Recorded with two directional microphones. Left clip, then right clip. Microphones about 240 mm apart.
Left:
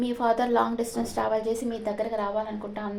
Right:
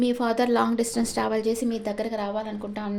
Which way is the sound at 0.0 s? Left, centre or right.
Right.